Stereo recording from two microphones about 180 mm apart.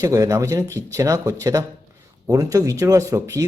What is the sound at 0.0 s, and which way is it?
Speech, 20° right (ahead or behind).